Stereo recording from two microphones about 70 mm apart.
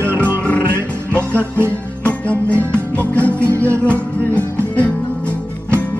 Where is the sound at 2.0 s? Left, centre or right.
Centre.